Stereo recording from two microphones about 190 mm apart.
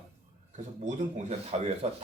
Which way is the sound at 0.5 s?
35° right (ahead or behind).